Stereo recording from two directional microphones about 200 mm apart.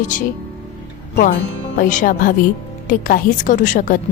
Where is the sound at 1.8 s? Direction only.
40° left (ahead or behind).